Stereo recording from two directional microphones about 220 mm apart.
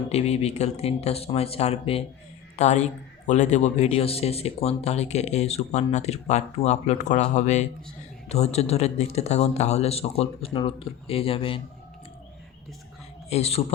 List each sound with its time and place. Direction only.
0.1 s a man's voice: 30° left (ahead or behind)
13.3 s speech: 30° left (ahead or behind)